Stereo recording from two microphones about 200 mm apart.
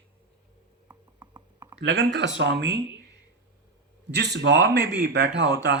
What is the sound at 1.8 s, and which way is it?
Speech, 65° right (ahead or behind).